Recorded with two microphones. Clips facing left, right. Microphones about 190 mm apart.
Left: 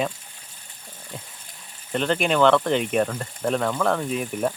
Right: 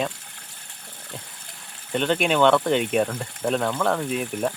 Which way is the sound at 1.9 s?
Centre (ahead or behind).